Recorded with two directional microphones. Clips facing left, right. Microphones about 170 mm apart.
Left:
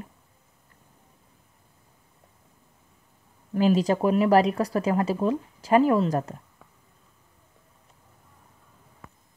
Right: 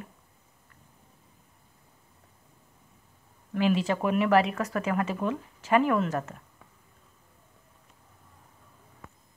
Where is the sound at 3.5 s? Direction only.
40° left (ahead or behind).